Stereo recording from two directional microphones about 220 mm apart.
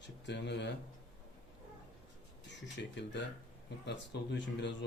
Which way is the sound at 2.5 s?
50° left (ahead or behind).